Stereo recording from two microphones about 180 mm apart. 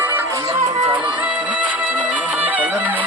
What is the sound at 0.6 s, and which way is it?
Music, 35° right (ahead or behind).